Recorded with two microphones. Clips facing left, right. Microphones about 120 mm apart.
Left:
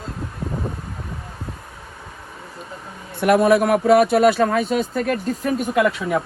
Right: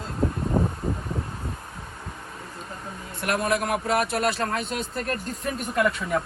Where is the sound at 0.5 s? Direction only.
30° right (ahead or behind).